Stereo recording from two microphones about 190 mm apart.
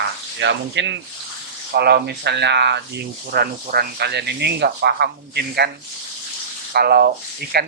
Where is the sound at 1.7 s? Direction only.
60° right (ahead or behind).